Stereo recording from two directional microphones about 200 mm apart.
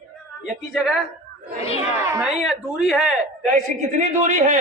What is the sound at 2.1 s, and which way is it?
Speech, 5° right (ahead or behind).